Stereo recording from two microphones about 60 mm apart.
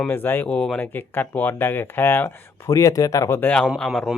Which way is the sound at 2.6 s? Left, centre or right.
Left.